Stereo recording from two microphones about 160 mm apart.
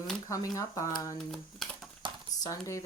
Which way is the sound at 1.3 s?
Centre (ahead or behind).